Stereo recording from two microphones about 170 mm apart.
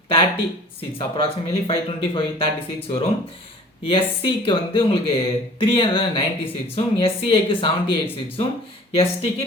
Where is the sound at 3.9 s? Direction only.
30° left (ahead or behind).